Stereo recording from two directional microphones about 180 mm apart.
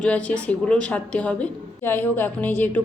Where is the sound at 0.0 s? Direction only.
5° left (ahead or behind).